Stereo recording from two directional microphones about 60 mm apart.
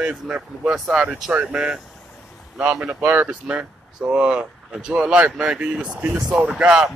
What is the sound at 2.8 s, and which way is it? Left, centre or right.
Speech, right.